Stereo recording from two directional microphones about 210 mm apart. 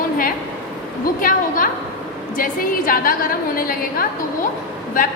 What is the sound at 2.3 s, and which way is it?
A woman's voice, 40° left (ahead or behind).